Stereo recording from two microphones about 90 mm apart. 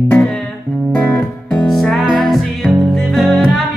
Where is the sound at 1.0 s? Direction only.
20° left (ahead or behind).